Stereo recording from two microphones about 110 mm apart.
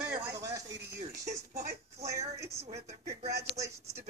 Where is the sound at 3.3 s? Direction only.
30° right (ahead or behind).